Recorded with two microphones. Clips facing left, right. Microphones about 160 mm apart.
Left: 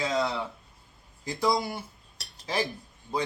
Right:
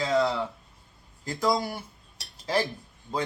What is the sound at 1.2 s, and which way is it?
Speech, 15° left (ahead or behind).